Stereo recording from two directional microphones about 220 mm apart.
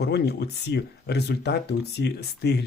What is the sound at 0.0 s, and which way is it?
Speech, 50° left (ahead or behind).